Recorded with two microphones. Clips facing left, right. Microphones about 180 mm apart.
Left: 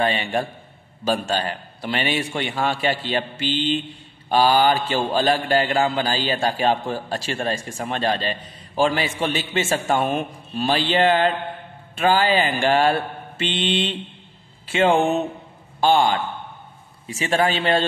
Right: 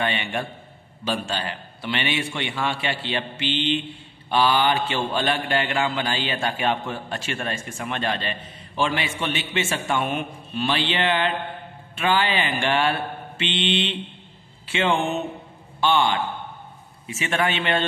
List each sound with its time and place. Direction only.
0.0 s a man's voice: 35° left (ahead or behind)